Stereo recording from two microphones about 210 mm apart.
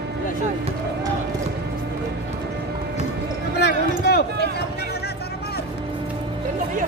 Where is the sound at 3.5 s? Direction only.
50° left (ahead or behind).